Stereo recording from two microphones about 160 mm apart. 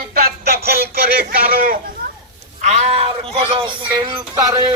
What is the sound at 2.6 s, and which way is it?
Speech, 40° right (ahead or behind).